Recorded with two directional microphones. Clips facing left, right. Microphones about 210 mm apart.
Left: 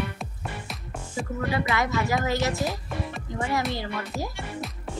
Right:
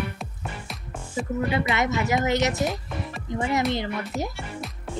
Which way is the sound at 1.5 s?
20° right (ahead or behind).